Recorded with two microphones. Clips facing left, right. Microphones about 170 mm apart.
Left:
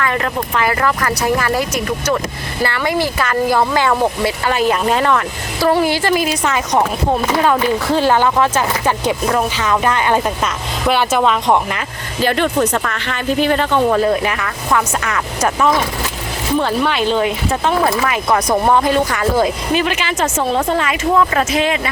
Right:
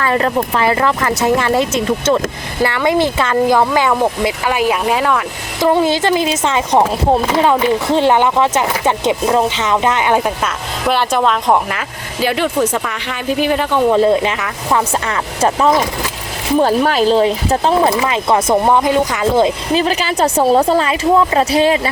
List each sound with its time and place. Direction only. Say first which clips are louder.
0.0 s speech: right 4 dB; 30° right (ahead or behind); by 5.2 s 5° right (ahead or behind)
5.5 s speech: right 2 dB; 20° right (ahead or behind)
13.9 s speech: right 3 dB; 25° right (ahead or behind)
16.6 s speech: right 5 dB; 40° right (ahead or behind)